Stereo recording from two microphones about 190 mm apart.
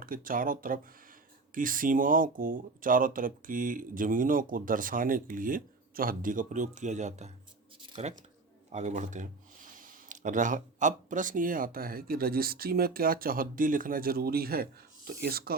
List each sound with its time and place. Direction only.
0.0 s speech: 50° right (ahead or behind)
7.8 s a sound: 30° right (ahead or behind)
8.7 s speech: 40° right (ahead or behind)